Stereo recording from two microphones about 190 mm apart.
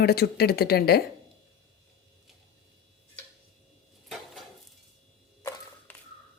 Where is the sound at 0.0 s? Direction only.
55° left (ahead or behind).